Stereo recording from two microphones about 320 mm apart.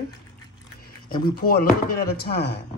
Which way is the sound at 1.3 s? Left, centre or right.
Left.